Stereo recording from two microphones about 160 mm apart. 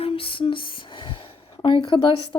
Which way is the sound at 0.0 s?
35° left (ahead or behind).